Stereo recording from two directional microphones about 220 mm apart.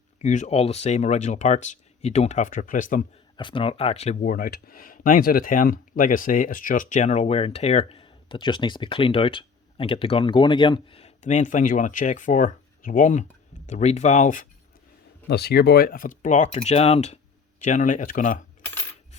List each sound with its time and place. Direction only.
0.2 s speech: 30° left (ahead or behind)
3.3 s speech: 20° left (ahead or behind)
15.3 s speech: 50° left (ahead or behind)